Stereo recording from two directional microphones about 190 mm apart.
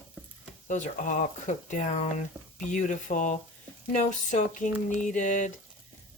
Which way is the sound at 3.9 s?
40° left (ahead or behind).